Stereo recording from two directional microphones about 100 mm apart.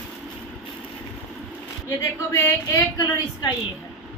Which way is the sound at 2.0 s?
30° left (ahead or behind).